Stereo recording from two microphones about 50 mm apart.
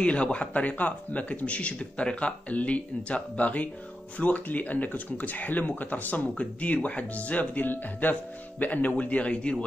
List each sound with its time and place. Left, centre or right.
0.0 s a man's voice: left